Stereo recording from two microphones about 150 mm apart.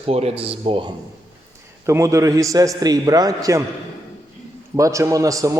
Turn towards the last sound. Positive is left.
turn(degrees=-20)  # may be behind; listen again after turning